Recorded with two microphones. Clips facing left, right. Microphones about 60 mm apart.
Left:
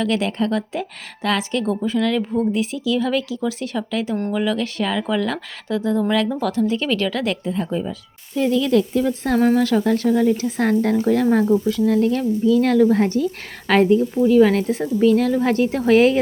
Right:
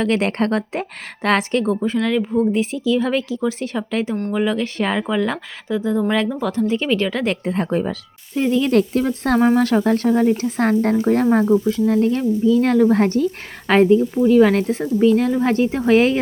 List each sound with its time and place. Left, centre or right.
0.0 s a woman's voice: right
1.6 s speech: right
2.0 s speech: centre
2.5 s speech: right
5.0 s speech: centre
7.4 s speech: right
8.4 s speech: right
8.7 s a woman's voice: right
13.7 s speech: right